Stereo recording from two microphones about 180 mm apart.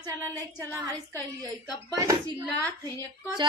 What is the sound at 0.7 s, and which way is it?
Speech, 15° right (ahead or behind).